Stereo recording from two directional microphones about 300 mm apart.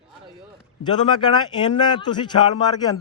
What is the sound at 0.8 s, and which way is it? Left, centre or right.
A man's voice, centre.